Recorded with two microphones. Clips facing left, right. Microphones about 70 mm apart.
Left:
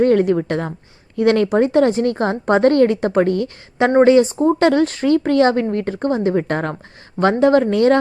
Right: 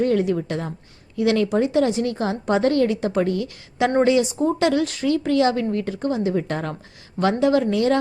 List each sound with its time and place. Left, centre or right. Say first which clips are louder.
0.0 s a woman's voice: left 6 dB; left